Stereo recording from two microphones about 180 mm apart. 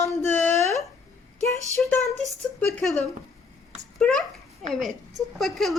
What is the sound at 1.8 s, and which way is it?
Speech, centre (ahead or behind).